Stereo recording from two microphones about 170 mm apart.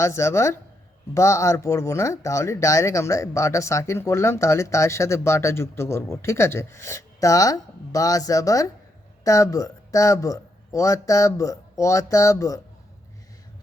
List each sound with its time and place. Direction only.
0.0 s a man's voice: 15° left (ahead or behind)